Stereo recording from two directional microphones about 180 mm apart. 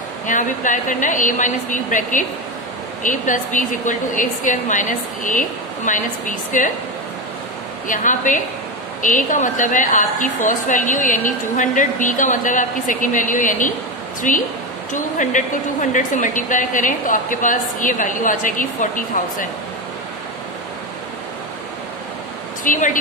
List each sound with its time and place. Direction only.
0.3 s a woman's voice: 45° left (ahead or behind)
7.9 s a woman's voice: 45° left (ahead or behind)
22.6 s speech: 45° left (ahead or behind)